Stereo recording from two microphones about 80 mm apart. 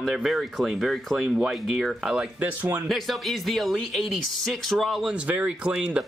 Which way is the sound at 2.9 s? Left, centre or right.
Centre.